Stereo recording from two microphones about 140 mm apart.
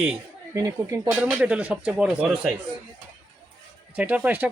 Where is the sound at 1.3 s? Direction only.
10° right (ahead or behind).